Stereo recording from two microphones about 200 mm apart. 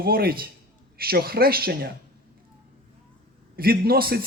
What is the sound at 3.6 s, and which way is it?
Speech, 50° right (ahead or behind).